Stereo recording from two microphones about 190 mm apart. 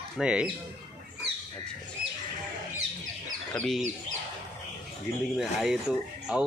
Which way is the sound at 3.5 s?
5° left (ahead or behind).